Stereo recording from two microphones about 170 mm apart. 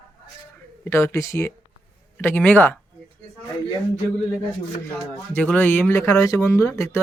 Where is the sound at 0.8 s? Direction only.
15° left (ahead or behind).